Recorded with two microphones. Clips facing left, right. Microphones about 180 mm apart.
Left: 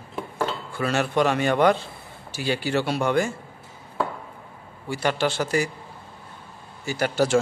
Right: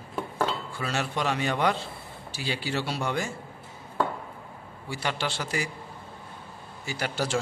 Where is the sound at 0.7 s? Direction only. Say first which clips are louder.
Left 8 dB; 55° left (ahead or behind).